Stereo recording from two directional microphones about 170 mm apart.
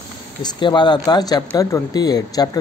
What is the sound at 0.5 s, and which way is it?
Speech, 25° left (ahead or behind).